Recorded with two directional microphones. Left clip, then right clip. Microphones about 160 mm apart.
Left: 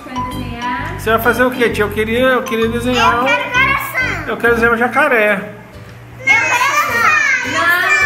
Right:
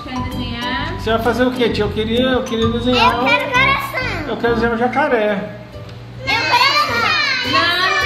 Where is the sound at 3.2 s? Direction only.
45° right (ahead or behind).